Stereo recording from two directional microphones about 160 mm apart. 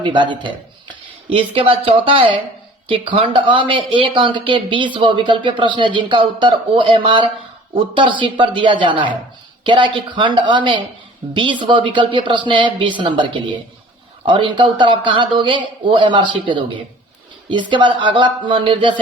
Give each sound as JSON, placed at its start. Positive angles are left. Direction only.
{"t": 0.0, "sound": "a woman's voice", "side_deg": -30}